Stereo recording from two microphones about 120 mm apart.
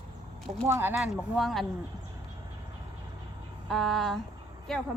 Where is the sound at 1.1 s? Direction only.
5° right (ahead or behind).